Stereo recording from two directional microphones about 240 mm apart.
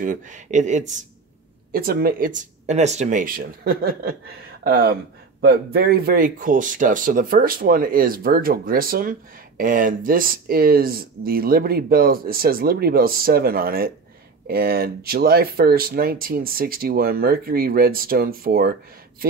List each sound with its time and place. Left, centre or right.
0.0 s speech: right